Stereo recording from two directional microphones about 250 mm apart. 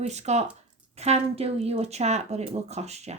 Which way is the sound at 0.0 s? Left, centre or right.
Right.